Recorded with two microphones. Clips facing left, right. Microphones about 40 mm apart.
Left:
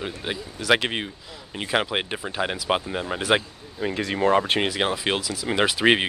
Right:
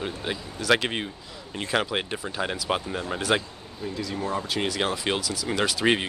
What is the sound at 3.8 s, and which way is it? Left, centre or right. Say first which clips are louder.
Speech: left 7 dB; left.